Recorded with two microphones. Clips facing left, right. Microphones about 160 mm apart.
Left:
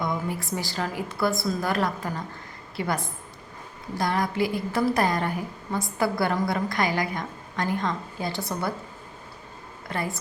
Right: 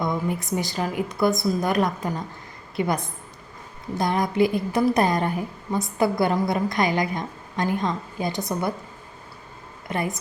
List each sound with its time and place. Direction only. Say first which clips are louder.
0.0 s a woman's voice: right 3 dB; 20° right (ahead or behind)
9.9 s a woman's voice: right 3 dB; 20° right (ahead or behind)